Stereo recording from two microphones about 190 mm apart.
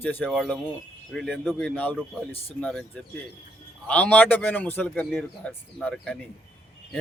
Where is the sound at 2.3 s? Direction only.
30° left (ahead or behind).